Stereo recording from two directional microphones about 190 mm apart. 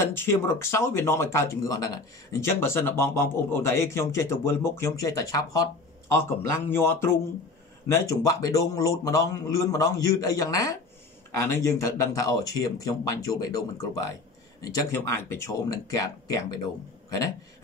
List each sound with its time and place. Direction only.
0.2 s speech: 10° left (ahead or behind)